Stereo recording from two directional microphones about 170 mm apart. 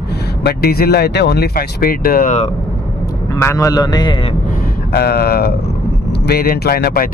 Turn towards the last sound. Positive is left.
turn(degrees=65)  # may be behind; listen again after turning